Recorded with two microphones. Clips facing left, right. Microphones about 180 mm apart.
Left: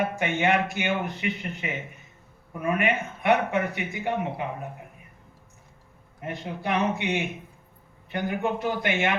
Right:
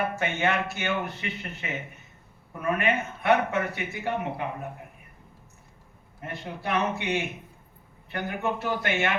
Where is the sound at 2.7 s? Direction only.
15° left (ahead or behind).